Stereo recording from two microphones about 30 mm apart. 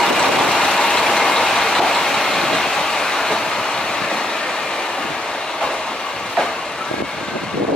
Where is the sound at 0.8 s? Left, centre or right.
Centre.